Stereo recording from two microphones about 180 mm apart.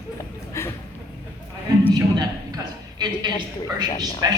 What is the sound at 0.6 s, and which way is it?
Speech, 15° left (ahead or behind).